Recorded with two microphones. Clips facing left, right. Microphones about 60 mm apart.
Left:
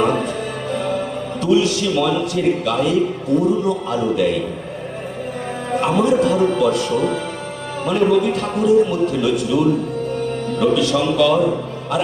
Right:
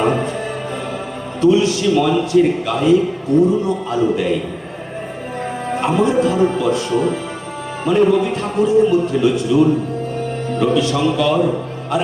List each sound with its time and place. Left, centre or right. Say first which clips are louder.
1.4 s a man's voice: right 3 dB; right
5.7 s a man's voice: even; right
7.9 s a man's voice: right 2 dB; right
10.6 s a man's voice: right 1 dB; right